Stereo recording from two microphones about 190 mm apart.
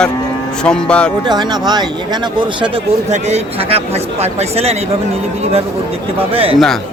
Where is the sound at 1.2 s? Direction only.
20° right (ahead or behind).